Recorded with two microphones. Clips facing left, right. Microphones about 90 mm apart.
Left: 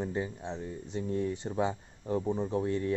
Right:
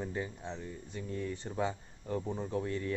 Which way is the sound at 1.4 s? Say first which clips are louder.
Left 4 dB; 20° left (ahead or behind).